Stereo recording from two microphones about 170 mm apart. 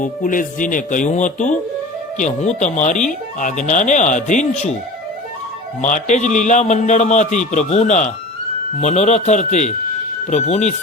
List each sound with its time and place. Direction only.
0.0 s a man's voice: 50° left (ahead or behind)
5.8 s a man's voice: 45° left (ahead or behind)